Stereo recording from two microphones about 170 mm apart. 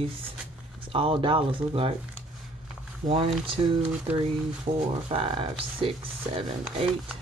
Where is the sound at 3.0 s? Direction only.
50° right (ahead or behind).